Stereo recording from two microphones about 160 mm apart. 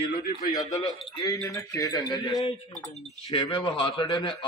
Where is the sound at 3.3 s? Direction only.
30° left (ahead or behind).